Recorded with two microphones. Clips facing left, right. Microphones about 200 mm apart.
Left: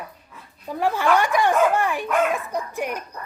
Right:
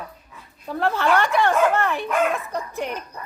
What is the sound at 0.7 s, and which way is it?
Speech, 10° left (ahead or behind).